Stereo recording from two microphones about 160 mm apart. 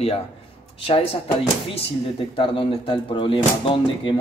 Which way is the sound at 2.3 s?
35° left (ahead or behind).